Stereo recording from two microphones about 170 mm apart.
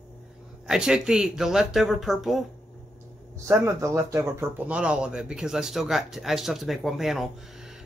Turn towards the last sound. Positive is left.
turn(degrees=0)  # may be behind; listen again after turning